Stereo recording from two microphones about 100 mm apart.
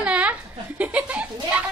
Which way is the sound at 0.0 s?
15° right (ahead or behind).